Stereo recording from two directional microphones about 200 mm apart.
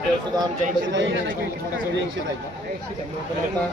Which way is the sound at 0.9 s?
65° right (ahead or behind).